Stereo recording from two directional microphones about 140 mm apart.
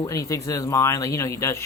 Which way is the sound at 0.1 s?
20° left (ahead or behind).